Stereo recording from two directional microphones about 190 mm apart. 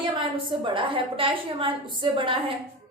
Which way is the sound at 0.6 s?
25° right (ahead or behind).